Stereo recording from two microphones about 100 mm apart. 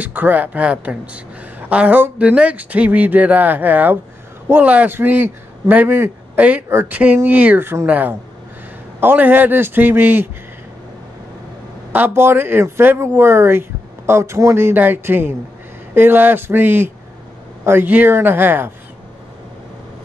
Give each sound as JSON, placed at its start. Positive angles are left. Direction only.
{"t": 0.0, "sound": "a man's voice", "side_deg": -20}
{"t": 12.1, "sound": "speech", "side_deg": -25}